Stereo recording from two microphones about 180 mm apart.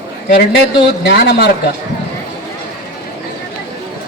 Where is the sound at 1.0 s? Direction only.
60° left (ahead or behind).